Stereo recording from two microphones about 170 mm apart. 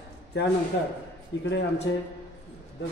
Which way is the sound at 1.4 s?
90° left.